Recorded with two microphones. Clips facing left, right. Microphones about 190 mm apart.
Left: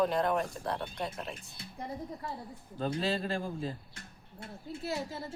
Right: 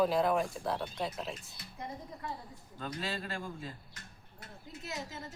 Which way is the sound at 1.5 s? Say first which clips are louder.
Left 3 dB; 25° left (ahead or behind).